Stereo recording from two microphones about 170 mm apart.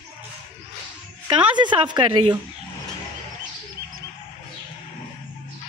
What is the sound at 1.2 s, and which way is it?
A woman's voice, 25° right (ahead or behind).